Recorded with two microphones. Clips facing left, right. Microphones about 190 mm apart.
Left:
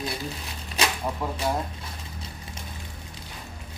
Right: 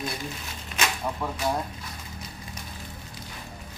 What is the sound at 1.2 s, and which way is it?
Speech, 10° left (ahead or behind).